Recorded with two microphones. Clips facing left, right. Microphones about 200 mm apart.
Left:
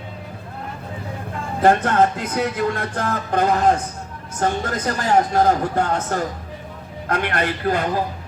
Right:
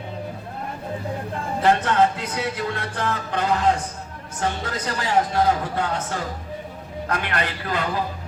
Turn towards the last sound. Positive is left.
turn(degrees=50)  # may be behind; listen again after turning